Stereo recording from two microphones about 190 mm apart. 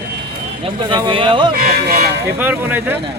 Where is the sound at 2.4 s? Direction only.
10° right (ahead or behind).